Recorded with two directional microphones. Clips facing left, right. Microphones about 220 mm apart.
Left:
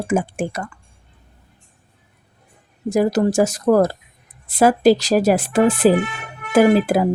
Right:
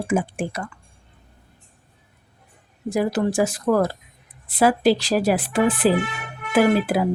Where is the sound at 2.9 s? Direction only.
40° left (ahead or behind).